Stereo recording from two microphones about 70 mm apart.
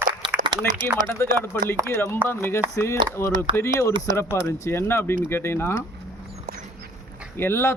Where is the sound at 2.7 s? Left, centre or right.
Left.